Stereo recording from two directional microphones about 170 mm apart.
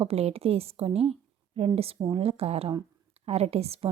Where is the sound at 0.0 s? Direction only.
35° right (ahead or behind).